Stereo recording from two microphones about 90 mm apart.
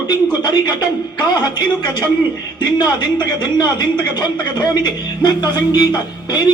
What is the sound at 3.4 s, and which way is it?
A man's voice, 55° left (ahead or behind).